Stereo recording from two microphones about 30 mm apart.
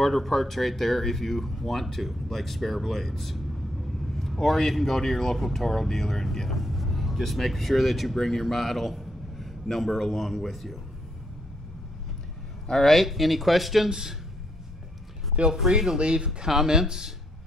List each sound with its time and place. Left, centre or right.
0.0 s speech: centre
6.5 s speech: centre
12.7 s speech: left
13.0 s speech: centre
13.8 s speech: right
15.4 s speech: right
16.0 s speech: right
16.4 s speech: centre